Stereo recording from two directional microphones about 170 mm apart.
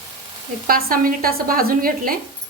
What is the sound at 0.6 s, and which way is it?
Speech, 55° right (ahead or behind).